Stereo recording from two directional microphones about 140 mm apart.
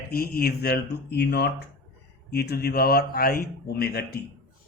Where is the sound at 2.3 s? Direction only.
90° left.